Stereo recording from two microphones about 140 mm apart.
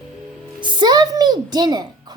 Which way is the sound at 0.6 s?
35° right (ahead or behind).